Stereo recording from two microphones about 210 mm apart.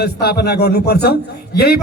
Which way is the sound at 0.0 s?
50° left (ahead or behind).